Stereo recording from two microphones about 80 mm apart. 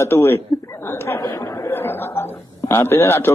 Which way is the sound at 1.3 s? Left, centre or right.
Left.